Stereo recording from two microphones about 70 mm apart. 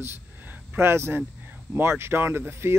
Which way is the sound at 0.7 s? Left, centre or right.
Right.